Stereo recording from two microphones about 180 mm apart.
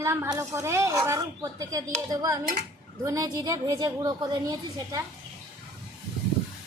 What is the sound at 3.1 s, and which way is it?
A woman's voice, 20° right (ahead or behind).